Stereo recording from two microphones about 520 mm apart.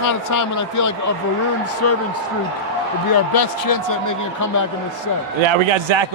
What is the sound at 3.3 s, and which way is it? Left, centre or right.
A man's voice, left.